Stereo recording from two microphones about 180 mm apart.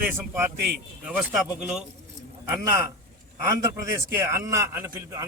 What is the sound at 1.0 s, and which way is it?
Speech, 5° right (ahead or behind).